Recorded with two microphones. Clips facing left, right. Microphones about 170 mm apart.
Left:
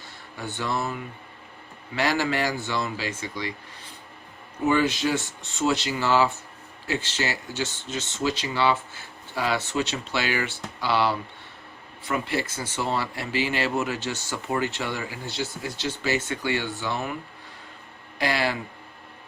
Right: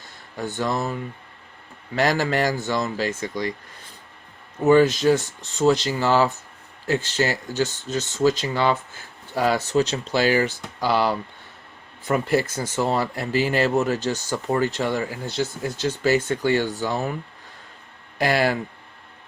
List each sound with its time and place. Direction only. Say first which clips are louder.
0.5 s speech: right 3 dB; 40° right (ahead or behind)
2.0 s speech: right 4 dB; 40° right (ahead or behind)
4.6 s speech: right 7 dB; 45° right (ahead or behind)
18.2 s speech: right 5 dB; 45° right (ahead or behind)